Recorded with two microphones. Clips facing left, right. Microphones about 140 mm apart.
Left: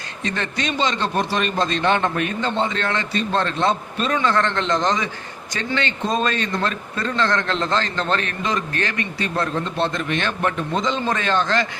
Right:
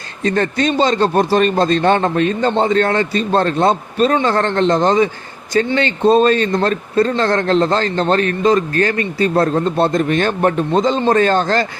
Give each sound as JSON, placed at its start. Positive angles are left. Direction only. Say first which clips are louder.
{"t": 0.3, "sound": "a man's voice", "louder": "right 9 dB", "side_deg": -40}